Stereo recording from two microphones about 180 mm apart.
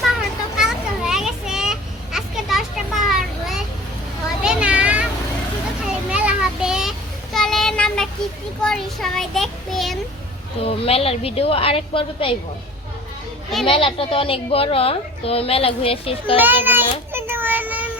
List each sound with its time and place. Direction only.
0.6 s children playing: centre (ahead or behind)
4.4 s a sound: 5° right (ahead or behind)
7.3 s child singing: centre (ahead or behind)
10.6 s a woman's voice: 35° left (ahead or behind)
13.7 s a woman's voice: 30° left (ahead or behind)
16.4 s child singing: 10° right (ahead or behind)